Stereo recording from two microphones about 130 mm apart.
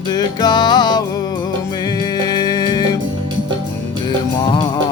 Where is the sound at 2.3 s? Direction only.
30° left (ahead or behind).